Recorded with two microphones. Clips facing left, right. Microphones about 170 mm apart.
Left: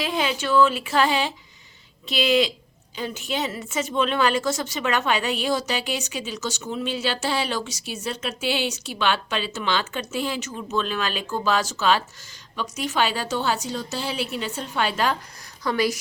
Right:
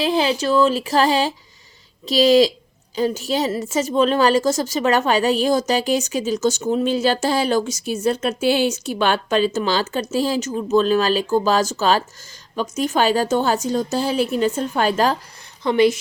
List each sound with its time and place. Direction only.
0.0 s a woman's voice: 35° right (ahead or behind)
15.6 s a woman's voice: 25° right (ahead or behind)